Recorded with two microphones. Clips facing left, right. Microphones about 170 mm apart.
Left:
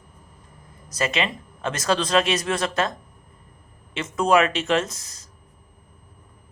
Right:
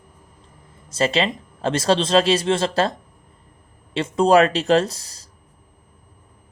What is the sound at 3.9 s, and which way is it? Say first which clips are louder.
Speech: right 4 dB; 30° right (ahead or behind).